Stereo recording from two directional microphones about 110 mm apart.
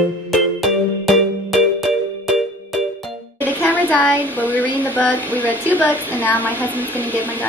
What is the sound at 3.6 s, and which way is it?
A woman's voice, 15° left (ahead or behind).